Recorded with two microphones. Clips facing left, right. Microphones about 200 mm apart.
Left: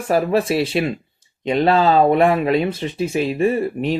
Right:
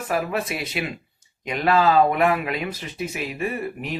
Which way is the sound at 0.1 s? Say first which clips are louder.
Left 8 dB; 30° left (ahead or behind).